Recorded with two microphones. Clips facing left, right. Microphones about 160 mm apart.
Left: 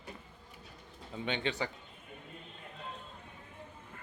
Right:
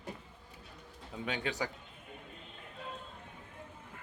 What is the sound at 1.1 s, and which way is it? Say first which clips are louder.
Speech: left 2 dB; 5° right (ahead or behind).